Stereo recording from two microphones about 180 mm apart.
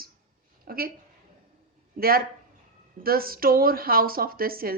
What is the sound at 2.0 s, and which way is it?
A woman's voice, 55° right (ahead or behind).